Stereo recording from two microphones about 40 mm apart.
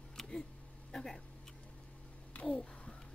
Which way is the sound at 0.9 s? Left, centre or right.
Centre.